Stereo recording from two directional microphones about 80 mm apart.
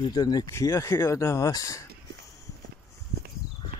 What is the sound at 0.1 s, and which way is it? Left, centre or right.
Speech, left.